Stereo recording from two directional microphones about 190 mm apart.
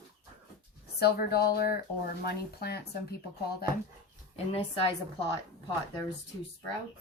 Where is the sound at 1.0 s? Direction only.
55° left (ahead or behind).